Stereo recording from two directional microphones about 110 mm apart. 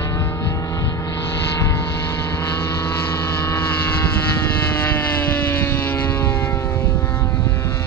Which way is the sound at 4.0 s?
20° left (ahead or behind).